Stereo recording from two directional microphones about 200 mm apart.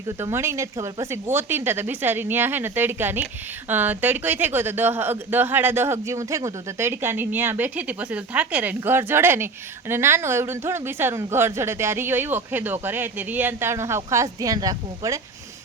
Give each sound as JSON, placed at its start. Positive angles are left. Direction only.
{"t": 0.2, "sound": "speech", "side_deg": -15}